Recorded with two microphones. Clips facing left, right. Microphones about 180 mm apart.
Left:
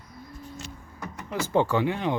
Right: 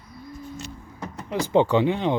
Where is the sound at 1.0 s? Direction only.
30° right (ahead or behind).